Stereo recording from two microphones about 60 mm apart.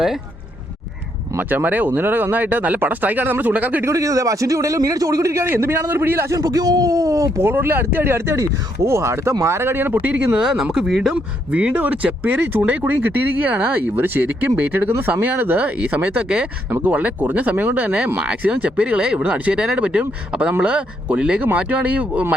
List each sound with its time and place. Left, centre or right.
1.4 s speech: right
3.8 s speech: right
6.3 s speech: right
7.4 s speech: right
10.3 s speech: centre
11.1 s speech: right